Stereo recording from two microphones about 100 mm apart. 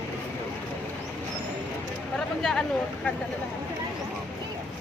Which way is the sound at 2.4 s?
5° left (ahead or behind).